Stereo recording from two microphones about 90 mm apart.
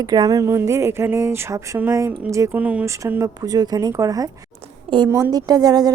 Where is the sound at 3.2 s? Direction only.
45° right (ahead or behind).